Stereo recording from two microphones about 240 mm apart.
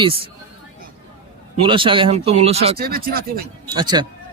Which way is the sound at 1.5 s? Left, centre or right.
Right.